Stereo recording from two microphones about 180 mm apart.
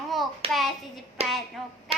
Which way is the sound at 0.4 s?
35° right (ahead or behind).